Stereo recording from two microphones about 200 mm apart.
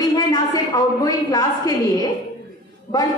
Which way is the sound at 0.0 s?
20° left (ahead or behind).